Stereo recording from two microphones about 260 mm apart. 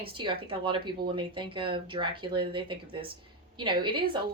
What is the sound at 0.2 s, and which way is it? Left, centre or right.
A woman's voice, centre.